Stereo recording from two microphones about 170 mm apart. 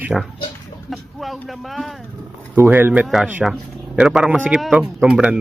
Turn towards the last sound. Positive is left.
turn(degrees=-5)  # may be behind; listen again after turning